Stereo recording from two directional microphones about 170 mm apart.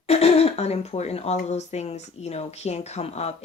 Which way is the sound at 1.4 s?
40° left (ahead or behind).